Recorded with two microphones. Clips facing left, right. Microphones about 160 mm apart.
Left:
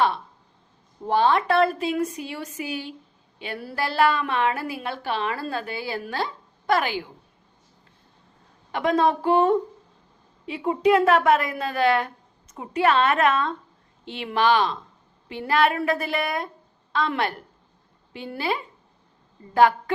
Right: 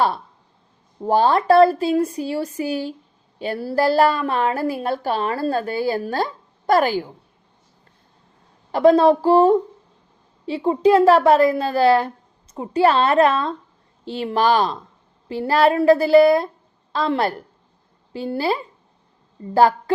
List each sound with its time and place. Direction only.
1.0 s a woman's voice: 40° right (ahead or behind)
8.7 s a woman's voice: 35° right (ahead or behind)